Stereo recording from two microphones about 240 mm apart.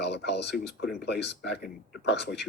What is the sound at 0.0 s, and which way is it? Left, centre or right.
Speech, left.